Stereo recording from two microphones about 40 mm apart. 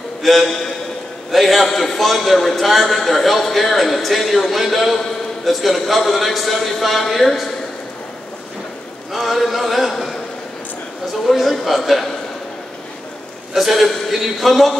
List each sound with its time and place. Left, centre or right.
0.2 s a man's voice: centre
9.1 s a man's voice: centre
11.2 s a man's voice: centre
13.5 s a man's voice: centre